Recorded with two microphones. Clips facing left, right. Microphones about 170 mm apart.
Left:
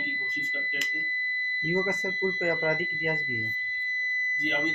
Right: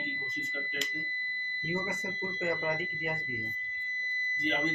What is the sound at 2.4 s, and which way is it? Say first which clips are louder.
Speech: left 1 dB; 55° left (ahead or behind).